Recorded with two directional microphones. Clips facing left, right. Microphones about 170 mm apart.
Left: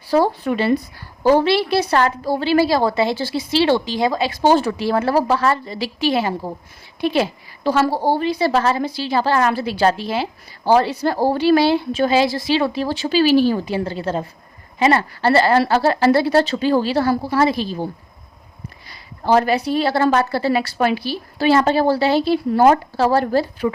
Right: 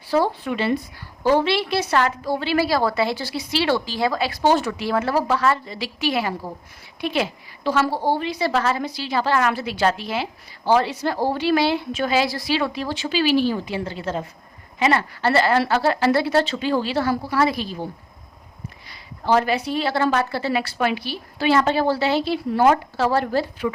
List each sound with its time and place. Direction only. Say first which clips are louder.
0.1 s a woman's voice: left 4 dB; 40° left (ahead or behind)
18.9 s a woman's voice: left 3 dB; 40° left (ahead or behind)